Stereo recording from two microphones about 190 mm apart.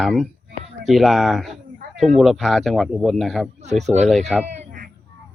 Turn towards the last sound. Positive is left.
turn(degrees=-50)  # may be behind; listen again after turning